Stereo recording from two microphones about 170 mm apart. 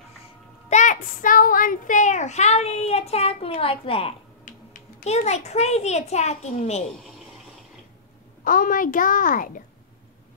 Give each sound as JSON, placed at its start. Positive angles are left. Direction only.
{"t": 0.7, "sound": "a child's voice", "side_deg": 45}
{"t": 4.5, "sound": "a child's voice", "side_deg": 45}
{"t": 8.5, "sound": "a child's voice", "side_deg": 50}